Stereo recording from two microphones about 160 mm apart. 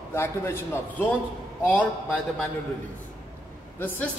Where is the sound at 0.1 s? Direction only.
15° left (ahead or behind).